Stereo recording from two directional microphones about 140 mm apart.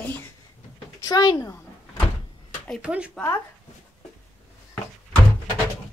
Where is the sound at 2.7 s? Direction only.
10° right (ahead or behind).